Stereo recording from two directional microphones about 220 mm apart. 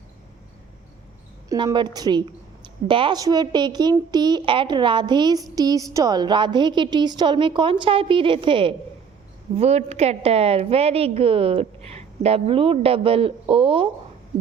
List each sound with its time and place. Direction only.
1.5 s a woman's voice: 20° right (ahead or behind)